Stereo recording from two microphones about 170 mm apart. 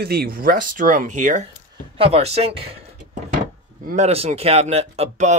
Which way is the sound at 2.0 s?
35° right (ahead or behind).